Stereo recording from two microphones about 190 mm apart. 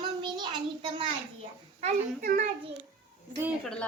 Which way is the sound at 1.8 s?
45° right (ahead or behind).